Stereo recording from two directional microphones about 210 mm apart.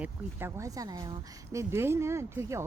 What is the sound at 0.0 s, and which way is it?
A woman's voice, 10° right (ahead or behind).